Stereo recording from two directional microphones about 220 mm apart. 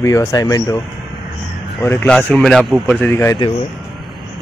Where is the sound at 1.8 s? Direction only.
10° left (ahead or behind).